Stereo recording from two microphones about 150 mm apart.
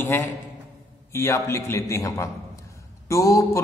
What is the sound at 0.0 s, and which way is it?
A man's voice, 15° left (ahead or behind).